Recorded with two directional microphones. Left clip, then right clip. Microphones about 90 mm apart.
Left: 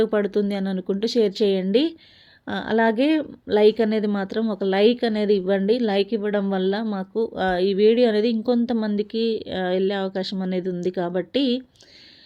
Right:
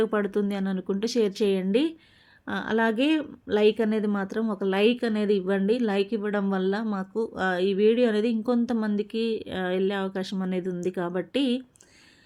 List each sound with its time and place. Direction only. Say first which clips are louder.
0.0 s a woman's voice: left 4 dB; 20° left (ahead or behind)
3.4 s speech: left 5 dB; 25° left (ahead or behind)
4.9 s a woman's voice: left 4 dB; 10° left (ahead or behind)